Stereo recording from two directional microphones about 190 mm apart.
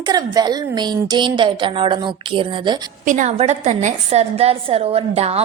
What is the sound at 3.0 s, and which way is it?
A woman's voice, 40° right (ahead or behind).